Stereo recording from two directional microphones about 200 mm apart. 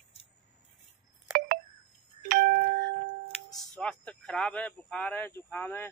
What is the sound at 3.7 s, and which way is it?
Speech, 5° left (ahead or behind).